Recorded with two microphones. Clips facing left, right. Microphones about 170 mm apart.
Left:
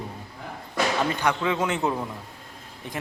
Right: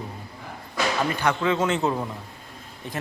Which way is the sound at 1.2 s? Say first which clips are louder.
Right 2 dB; 15° left (ahead or behind).